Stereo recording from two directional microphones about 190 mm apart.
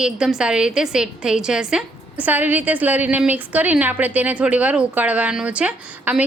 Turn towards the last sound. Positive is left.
turn(degrees=-5)  # may be behind; listen again after turning